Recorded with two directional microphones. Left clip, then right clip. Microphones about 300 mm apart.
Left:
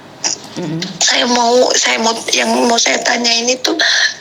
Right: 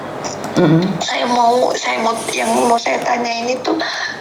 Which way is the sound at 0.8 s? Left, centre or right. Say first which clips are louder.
Left 4 dB; left.